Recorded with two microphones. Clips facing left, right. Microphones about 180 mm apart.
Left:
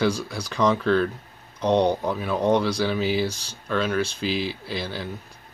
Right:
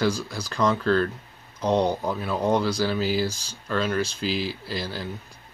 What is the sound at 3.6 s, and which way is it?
Speech, centre (ahead or behind).